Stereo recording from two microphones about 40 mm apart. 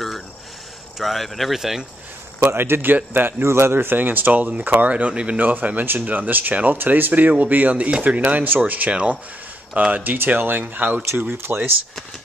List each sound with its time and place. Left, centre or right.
0.9 s speech: centre
2.4 s speech: right
4.9 s speech: right
5.4 s speech: right
6.8 s speech: right
10.1 s speech: right